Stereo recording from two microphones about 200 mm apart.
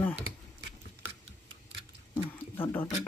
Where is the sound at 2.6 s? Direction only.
10° left (ahead or behind).